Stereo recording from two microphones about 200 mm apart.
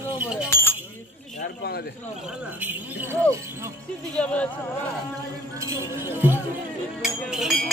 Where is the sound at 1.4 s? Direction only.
50° left (ahead or behind).